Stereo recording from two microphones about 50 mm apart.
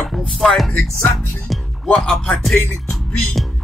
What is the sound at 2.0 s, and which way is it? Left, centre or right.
Speech, centre.